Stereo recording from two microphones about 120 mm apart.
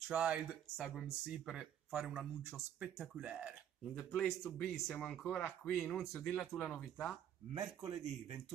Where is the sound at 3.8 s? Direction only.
5° left (ahead or behind).